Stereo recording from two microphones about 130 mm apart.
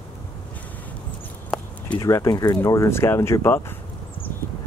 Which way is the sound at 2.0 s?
25° left (ahead or behind).